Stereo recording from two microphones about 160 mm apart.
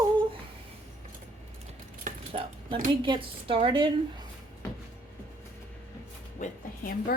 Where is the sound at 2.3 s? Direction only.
35° right (ahead or behind).